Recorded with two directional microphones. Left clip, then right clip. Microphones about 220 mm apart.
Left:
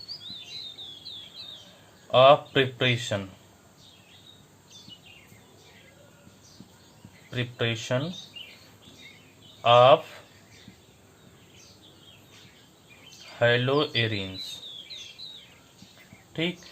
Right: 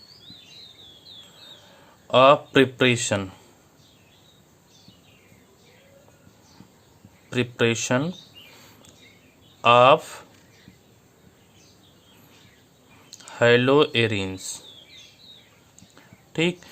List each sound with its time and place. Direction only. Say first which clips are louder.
2.0 s speech: right 2 dB; 50° right (ahead or behind)
7.3 s speech: right 7 dB; 50° right (ahead or behind)
9.6 s speech: right 2 dB; 50° right (ahead or behind)
13.4 s speech: right 6 dB; 50° right (ahead or behind)